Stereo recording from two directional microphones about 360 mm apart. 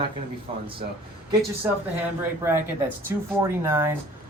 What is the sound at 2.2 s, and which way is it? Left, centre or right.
A man's voice, centre.